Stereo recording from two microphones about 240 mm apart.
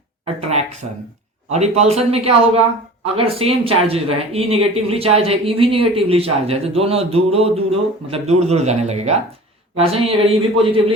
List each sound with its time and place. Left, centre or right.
1.5 s speech: right